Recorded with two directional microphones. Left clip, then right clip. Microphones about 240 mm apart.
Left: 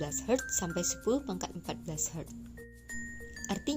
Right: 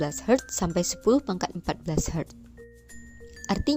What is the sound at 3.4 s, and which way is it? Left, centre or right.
Speech, right.